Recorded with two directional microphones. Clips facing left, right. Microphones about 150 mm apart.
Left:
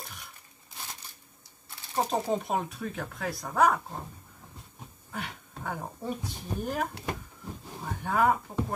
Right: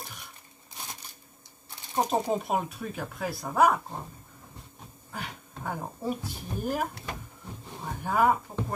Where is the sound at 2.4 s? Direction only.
5° right (ahead or behind).